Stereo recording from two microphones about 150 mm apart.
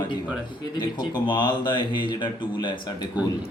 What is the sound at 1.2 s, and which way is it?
Speech, 30° left (ahead or behind).